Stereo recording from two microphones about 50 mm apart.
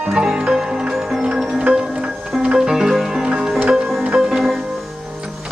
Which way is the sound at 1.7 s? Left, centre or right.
Centre.